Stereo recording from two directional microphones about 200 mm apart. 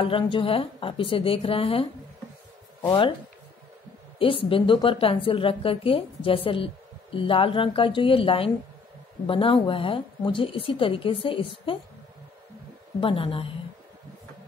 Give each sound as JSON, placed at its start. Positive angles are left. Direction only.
{"t": 0.0, "sound": "a woman's voice", "side_deg": 25}
{"t": 2.9, "sound": "a woman's voice", "side_deg": 25}
{"t": 4.2, "sound": "a woman's voice", "side_deg": 25}
{"t": 13.0, "sound": "a woman's voice", "side_deg": 25}